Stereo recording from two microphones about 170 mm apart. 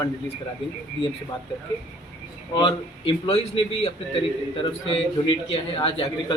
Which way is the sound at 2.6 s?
30° left (ahead or behind).